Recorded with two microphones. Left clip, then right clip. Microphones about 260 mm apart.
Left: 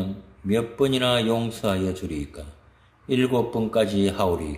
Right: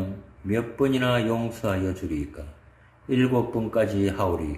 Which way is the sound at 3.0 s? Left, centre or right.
Left.